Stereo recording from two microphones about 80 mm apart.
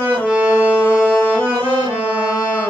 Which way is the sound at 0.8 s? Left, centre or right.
Centre.